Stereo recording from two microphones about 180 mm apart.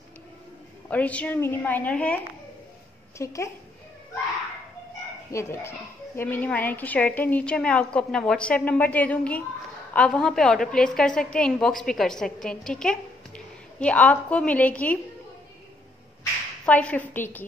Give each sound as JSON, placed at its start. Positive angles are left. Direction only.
{"t": 0.8, "sound": "a woman's voice", "side_deg": 10}
{"t": 3.2, "sound": "a woman's voice", "side_deg": 15}
{"t": 5.3, "sound": "a woman's voice", "side_deg": 15}
{"t": 16.6, "sound": "a woman's voice", "side_deg": 10}